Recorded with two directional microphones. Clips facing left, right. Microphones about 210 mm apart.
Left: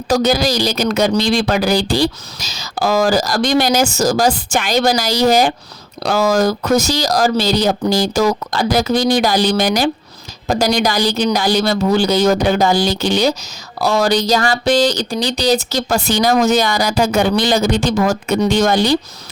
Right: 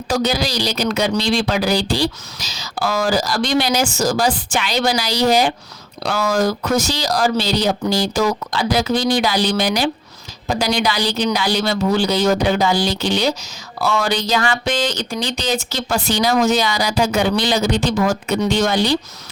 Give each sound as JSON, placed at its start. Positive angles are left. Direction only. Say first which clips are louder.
{"t": 0.1, "sound": "speech", "louder": "left 5 dB", "side_deg": 45}